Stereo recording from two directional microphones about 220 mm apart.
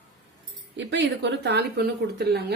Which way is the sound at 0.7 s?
55° right (ahead or behind).